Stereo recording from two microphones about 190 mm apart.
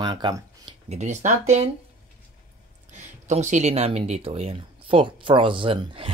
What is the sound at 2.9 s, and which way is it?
Speech, 40° right (ahead or behind).